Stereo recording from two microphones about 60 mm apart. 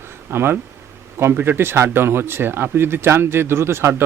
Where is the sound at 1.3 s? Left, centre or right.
Right.